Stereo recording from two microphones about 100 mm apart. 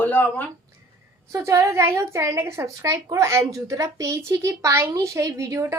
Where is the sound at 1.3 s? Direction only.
30° right (ahead or behind).